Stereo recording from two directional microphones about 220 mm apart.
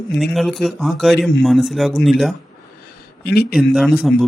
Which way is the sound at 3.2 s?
45° left (ahead or behind).